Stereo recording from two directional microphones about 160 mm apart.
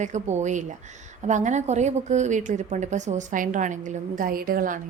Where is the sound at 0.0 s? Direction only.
45° right (ahead or behind).